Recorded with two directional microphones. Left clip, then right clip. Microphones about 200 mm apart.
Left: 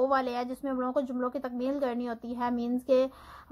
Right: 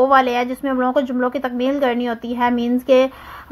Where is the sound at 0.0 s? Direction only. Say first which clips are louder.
Right 13 dB; 20° right (ahead or behind).